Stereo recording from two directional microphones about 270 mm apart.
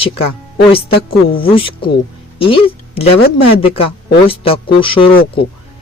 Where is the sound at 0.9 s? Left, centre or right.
Left.